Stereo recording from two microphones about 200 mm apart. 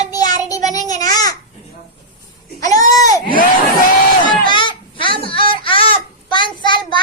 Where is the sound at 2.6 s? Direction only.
15° left (ahead or behind).